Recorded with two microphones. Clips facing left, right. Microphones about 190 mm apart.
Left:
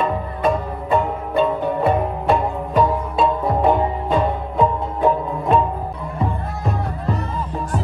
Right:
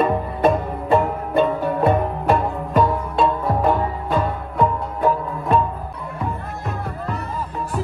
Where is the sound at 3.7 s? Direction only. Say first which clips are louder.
Left 2 dB; 15° left (ahead or behind).